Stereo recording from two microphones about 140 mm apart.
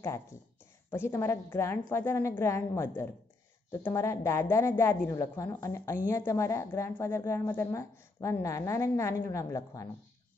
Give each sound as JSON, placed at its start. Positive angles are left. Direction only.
{"t": 0.8, "sound": "a woman's voice", "side_deg": 15}